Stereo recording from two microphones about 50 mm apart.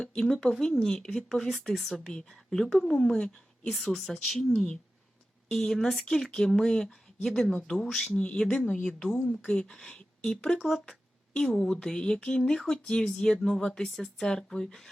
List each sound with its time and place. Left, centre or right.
0.0 s a woman's voice: centre
1.5 s speech: centre
2.0 s a woman's voice: centre
3.7 s a woman's voice: centre